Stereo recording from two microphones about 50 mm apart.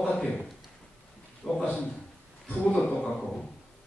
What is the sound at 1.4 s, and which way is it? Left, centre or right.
Speech, centre.